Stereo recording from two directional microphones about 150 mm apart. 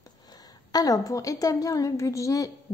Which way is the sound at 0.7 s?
25° left (ahead or behind).